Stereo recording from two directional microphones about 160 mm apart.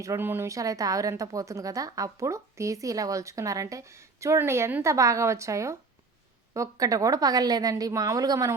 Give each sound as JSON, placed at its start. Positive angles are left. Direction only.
{"t": 0.0, "sound": "speech", "side_deg": -15}